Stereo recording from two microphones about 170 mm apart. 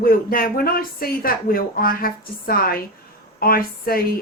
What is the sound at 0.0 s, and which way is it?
A woman's voice, 60° left (ahead or behind).